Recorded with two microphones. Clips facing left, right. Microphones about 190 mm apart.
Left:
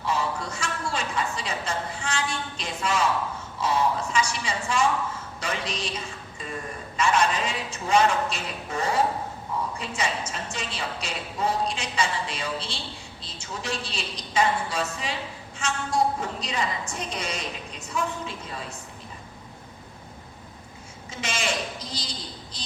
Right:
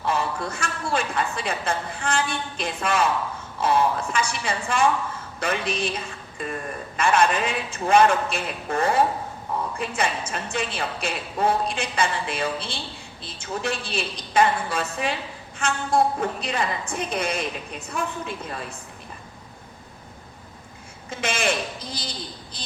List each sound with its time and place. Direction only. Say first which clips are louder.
0.0 s a woman's voice: right 2 dB; 55° right (ahead or behind)
21.1 s a woman's voice: right 5 dB; 55° right (ahead or behind)